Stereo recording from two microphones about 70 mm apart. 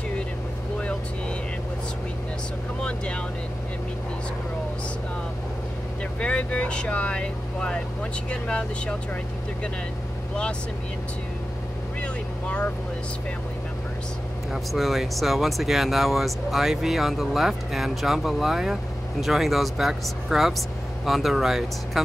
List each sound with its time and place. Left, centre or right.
6.1 s speech: centre
12.0 s vehicle: centre
14.5 s speech: centre